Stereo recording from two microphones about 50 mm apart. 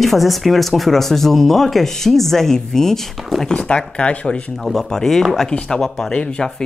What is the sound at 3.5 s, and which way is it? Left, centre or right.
Speech, centre.